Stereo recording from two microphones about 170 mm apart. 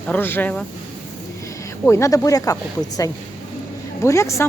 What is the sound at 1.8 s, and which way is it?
Speech, 15° left (ahead or behind).